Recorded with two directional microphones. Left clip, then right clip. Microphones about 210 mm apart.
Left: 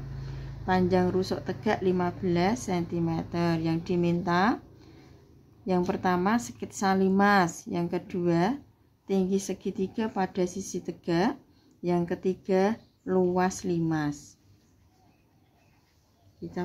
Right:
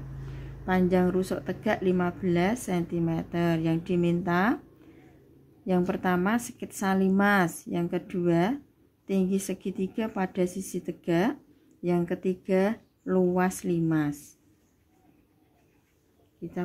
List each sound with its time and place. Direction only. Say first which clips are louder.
0.7 s a woman's voice: even; 15° right (ahead or behind)
5.7 s a woman's voice: even; 15° right (ahead or behind)